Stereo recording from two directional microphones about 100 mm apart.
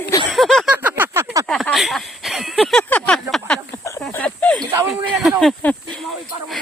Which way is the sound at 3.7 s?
25° left (ahead or behind).